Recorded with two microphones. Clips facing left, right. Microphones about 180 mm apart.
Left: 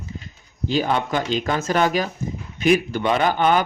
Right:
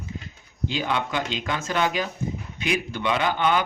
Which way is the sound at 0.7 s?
40° left (ahead or behind).